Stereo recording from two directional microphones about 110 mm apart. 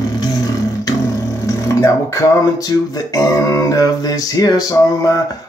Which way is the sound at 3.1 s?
30° left (ahead or behind).